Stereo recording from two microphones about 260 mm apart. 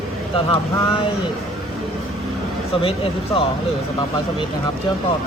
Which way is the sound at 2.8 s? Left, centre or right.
Left.